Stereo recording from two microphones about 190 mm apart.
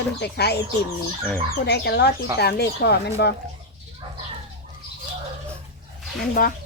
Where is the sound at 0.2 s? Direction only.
60° left (ahead or behind).